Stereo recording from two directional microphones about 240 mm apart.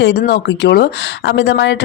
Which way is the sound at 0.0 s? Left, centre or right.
Left.